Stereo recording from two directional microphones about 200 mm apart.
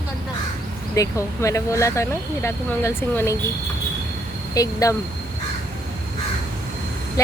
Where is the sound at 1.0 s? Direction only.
15° left (ahead or behind).